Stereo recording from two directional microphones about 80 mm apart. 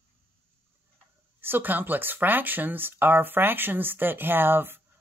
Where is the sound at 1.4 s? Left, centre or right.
Right.